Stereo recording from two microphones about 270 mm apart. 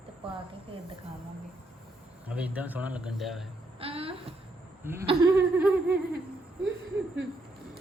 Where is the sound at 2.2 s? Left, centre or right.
Centre.